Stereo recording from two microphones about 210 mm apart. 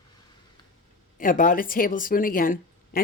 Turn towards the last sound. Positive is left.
turn(degrees=40)  # may be behind; listen again after turning